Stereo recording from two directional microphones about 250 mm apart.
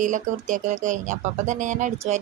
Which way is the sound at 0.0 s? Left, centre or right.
Right.